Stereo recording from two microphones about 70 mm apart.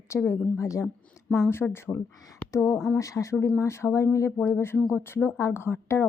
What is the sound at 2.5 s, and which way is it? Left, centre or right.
Speech, left.